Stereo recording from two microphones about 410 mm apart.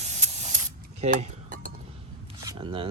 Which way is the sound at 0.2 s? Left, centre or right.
Centre.